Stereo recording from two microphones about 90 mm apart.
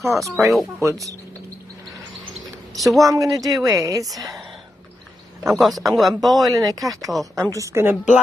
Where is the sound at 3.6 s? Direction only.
40° right (ahead or behind).